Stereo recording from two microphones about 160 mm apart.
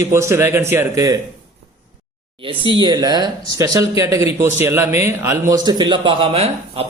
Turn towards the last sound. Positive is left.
turn(degrees=-35)  # may be behind; listen again after turning